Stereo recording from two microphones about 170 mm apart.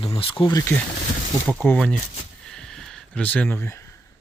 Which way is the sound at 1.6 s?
5° left (ahead or behind).